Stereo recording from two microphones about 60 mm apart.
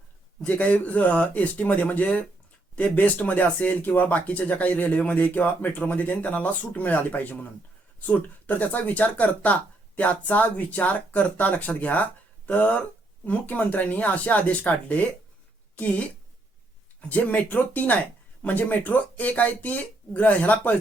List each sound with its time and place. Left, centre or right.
0.4 s speech: left